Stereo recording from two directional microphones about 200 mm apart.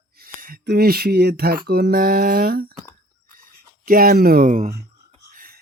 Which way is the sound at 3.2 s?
45° right (ahead or behind).